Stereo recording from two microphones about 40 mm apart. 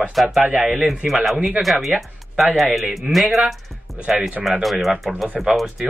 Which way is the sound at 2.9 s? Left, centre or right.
Centre.